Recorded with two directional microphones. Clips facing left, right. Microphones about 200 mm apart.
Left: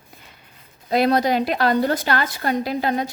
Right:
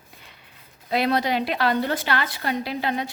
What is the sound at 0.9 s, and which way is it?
A woman's voice, 45° left (ahead or behind).